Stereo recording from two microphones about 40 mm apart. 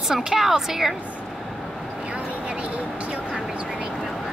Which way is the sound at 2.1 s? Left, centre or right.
Right.